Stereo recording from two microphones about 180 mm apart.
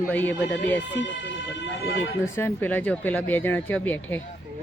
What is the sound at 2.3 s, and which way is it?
Speech, 10° left (ahead or behind).